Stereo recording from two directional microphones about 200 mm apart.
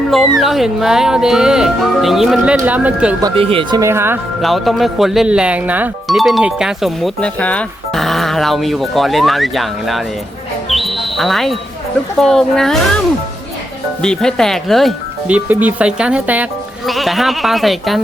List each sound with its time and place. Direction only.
0.1 s speech: centre (ahead or behind)
3.2 s speech: 25° right (ahead or behind)
4.4 s speech: centre (ahead or behind)
10.7 s a sound: centre (ahead or behind)
12.2 s speech: centre (ahead or behind)
14.0 s speech: 5° left (ahead or behind)